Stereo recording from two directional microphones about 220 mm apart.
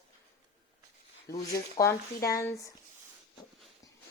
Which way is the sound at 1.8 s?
15° left (ahead or behind).